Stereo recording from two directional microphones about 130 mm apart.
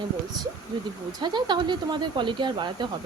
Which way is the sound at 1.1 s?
35° right (ahead or behind).